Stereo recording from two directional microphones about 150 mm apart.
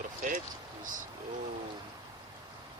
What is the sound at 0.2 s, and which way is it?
Speech, 65° right (ahead or behind).